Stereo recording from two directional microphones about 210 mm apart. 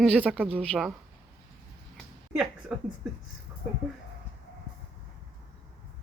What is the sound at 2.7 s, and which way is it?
Speech, 5° right (ahead or behind).